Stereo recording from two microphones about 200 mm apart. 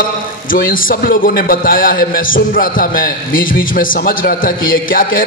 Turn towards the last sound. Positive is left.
turn(degrees=45)  # may be behind; listen again after turning